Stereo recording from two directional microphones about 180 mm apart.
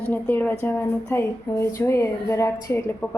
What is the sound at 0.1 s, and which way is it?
A woman's voice, 10° left (ahead or behind).